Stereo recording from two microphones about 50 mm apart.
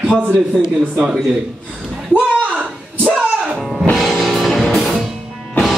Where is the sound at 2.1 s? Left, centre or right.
Right.